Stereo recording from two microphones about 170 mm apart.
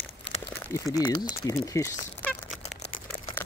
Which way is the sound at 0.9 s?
25° left (ahead or behind).